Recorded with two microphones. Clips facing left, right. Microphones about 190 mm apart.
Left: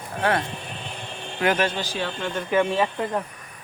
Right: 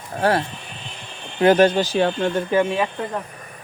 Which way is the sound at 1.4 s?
35° right (ahead or behind).